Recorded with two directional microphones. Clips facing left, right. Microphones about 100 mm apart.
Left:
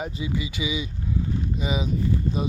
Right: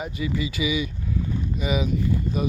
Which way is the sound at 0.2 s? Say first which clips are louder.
Right 7 dB; 20° left (ahead or behind).